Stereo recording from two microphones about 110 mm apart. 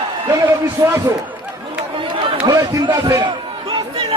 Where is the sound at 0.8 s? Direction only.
35° right (ahead or behind).